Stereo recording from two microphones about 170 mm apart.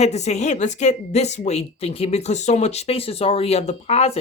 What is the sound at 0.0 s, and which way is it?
A woman's voice, 40° left (ahead or behind).